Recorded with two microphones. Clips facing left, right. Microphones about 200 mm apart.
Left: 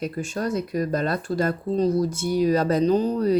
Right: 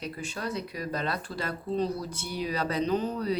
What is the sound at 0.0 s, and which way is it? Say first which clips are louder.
Speech: left 8 dB; 45° left (ahead or behind).